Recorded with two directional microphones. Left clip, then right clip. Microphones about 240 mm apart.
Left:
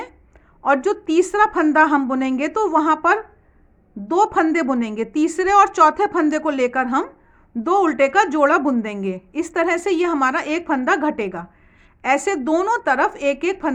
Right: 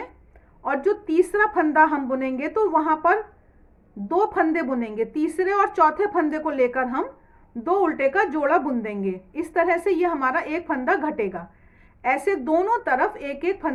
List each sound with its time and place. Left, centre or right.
0.6 s a woman's voice: left